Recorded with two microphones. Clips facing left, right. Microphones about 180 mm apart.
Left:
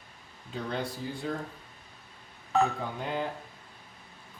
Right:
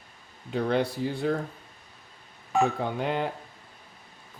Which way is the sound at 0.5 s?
70° right (ahead or behind).